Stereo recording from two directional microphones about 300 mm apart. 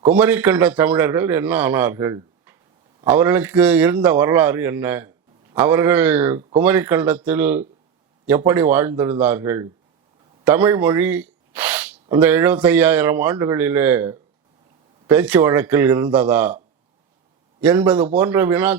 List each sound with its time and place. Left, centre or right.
0.0 s a man's voice: centre
17.6 s a man's voice: centre